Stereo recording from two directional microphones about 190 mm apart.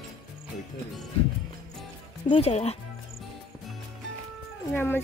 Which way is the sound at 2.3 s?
35° left (ahead or behind).